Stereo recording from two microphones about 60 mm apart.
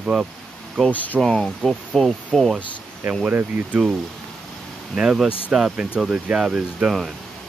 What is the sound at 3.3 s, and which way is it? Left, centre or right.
Speech, right.